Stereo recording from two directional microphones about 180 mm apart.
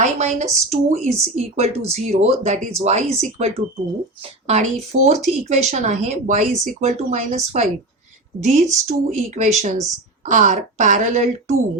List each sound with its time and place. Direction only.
0.0 s speech: 40° right (ahead or behind)